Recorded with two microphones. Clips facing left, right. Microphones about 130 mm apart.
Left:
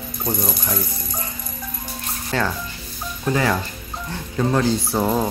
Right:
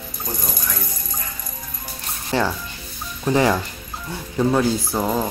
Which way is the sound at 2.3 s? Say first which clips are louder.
Right 2 dB; 15° right (ahead or behind).